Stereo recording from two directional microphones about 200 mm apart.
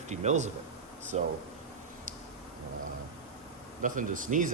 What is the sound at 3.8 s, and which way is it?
Speech, 40° right (ahead or behind).